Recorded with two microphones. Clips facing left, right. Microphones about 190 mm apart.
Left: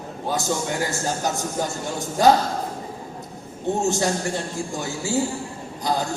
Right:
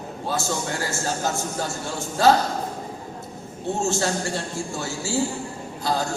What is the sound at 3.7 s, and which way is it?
A man's voice, 15° left (ahead or behind).